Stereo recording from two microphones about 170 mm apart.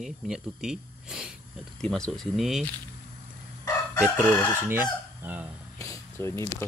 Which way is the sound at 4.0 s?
10° left (ahead or behind).